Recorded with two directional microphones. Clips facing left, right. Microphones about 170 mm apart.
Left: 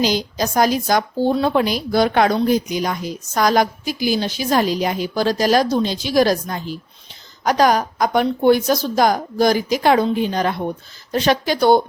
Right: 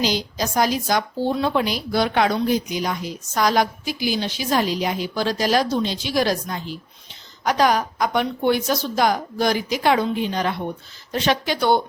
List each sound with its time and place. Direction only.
0.0 s a woman's voice: 45° left (ahead or behind)